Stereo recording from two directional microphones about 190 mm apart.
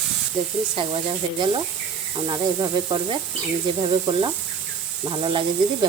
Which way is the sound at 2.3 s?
20° right (ahead or behind).